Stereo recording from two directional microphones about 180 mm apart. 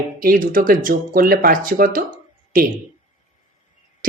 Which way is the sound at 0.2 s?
50° right (ahead or behind).